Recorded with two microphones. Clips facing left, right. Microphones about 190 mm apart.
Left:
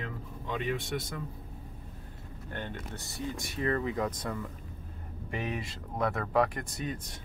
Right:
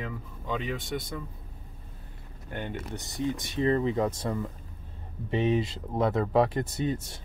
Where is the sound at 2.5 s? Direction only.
15° right (ahead or behind).